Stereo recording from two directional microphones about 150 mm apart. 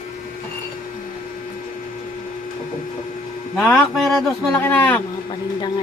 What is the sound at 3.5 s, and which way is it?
Speech, 5° left (ahead or behind).